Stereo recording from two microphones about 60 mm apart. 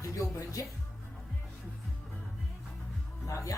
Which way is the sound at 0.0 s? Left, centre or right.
Left.